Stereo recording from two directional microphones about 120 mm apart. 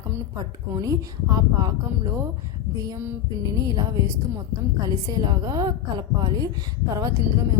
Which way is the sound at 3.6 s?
30° right (ahead or behind).